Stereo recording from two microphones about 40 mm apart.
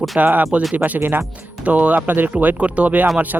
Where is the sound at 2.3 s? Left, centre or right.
Right.